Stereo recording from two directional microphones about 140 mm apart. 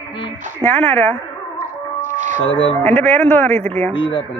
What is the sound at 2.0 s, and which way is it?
Music, 60° right (ahead or behind).